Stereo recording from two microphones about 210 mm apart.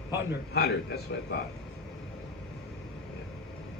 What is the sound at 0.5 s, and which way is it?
Speech, 50° left (ahead or behind).